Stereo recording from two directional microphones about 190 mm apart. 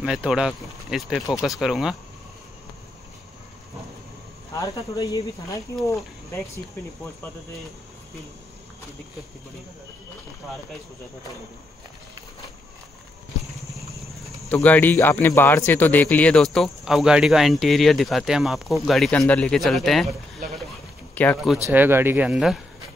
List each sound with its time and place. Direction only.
0.0 s a man's voice: 5° right (ahead or behind)
4.6 s speech: 15° left (ahead or behind)
14.5 s a man's voice: 10° left (ahead or behind)
21.1 s speech: 10° left (ahead or behind)
21.6 s speech: 10° right (ahead or behind)